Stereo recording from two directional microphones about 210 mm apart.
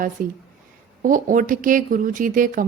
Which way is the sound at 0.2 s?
40° right (ahead or behind).